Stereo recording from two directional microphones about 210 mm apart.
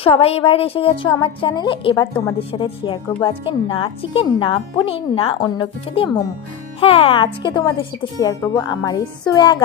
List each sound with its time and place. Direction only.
0.0 s speech: 30° left (ahead or behind)